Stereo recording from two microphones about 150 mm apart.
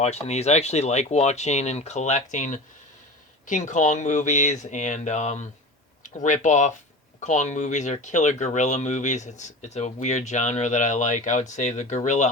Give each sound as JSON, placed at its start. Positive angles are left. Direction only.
{"t": 0.0, "sound": "speech", "side_deg": 45}